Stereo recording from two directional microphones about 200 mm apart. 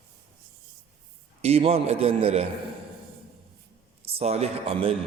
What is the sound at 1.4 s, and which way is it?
A man's voice, 30° right (ahead or behind).